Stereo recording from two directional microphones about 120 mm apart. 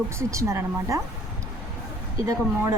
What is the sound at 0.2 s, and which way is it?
Speech, 25° right (ahead or behind).